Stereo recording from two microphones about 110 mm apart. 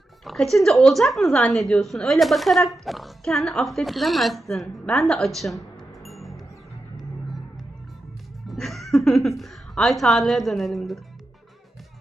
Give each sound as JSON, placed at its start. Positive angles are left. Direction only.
{"t": 0.3, "sound": "a woman's voice", "side_deg": 0}
{"t": 8.4, "sound": "chuckle", "side_deg": 0}
{"t": 9.4, "sound": "a woman's voice", "side_deg": 0}